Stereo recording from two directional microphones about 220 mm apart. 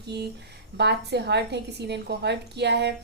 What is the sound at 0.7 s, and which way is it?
A woman's voice, 50° right (ahead or behind).